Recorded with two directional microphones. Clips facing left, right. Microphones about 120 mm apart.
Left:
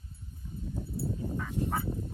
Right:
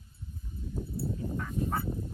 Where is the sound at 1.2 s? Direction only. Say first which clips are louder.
Even; 5° left (ahead or behind).